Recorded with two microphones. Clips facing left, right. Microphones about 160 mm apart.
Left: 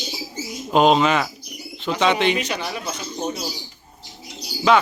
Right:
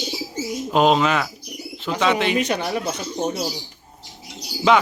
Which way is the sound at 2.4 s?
50° right (ahead or behind).